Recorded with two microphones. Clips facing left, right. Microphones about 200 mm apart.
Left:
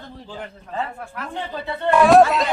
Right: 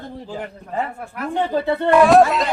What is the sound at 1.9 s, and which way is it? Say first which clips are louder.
Speech: even; centre (ahead or behind).